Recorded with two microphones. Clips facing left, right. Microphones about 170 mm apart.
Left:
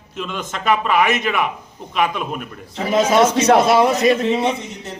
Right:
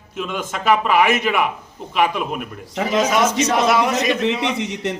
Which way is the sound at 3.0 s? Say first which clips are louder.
Left 3 dB; 30° left (ahead or behind).